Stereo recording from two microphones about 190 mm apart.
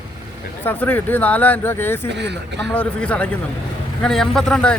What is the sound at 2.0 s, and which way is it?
Speech, 65° right (ahead or behind).